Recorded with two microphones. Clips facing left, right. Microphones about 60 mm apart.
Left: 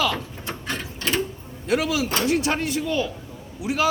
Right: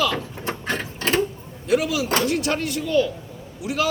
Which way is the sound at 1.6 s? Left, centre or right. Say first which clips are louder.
Right 2 dB; left.